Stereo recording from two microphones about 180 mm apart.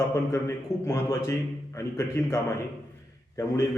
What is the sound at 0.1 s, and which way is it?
A man's voice, 15° left (ahead or behind).